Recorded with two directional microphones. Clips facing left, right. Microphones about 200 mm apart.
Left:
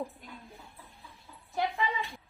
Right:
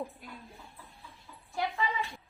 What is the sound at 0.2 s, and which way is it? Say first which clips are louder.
Speech: right 1 dB; 10° right (ahead or behind).